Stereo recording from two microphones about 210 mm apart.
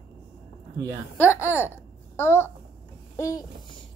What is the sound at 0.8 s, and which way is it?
Speech, 15° right (ahead or behind).